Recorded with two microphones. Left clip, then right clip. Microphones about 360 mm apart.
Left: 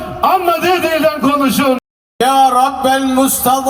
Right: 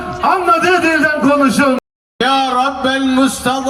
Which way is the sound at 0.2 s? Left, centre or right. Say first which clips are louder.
Even; centre.